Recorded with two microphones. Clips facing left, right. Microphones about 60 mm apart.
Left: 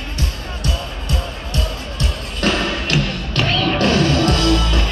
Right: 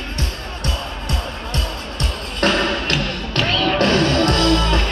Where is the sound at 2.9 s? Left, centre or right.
Centre.